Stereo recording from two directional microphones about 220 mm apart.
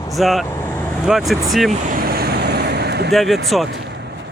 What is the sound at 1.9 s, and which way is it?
Vehicle, 45° right (ahead or behind).